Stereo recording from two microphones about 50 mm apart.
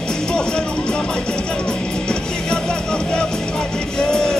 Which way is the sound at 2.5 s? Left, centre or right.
Centre.